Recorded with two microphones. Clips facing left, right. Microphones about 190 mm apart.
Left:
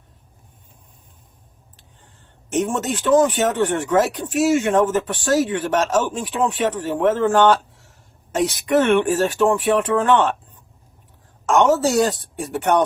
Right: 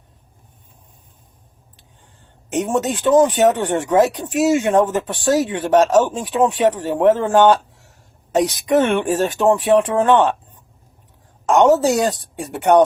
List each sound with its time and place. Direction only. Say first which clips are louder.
2.5 s speech: right 2 dB; 15° right (ahead or behind)
11.4 s a woman's voice: right 3 dB; 15° right (ahead or behind)